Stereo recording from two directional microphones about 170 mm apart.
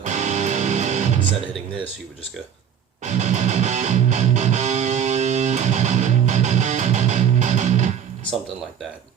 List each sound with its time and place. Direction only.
0.0 s music: 45° right (ahead or behind)
3.0 s music: 40° right (ahead or behind)